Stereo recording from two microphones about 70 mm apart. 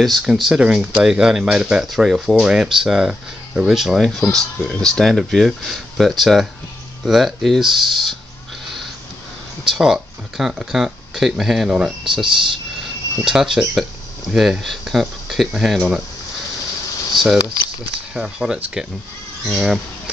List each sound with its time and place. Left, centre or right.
0.2 s speech: centre
9.7 s speech: centre
17.1 s speech: centre